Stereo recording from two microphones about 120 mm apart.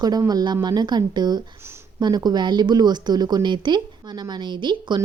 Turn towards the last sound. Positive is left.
turn(degrees=-40)  # may be behind; listen again after turning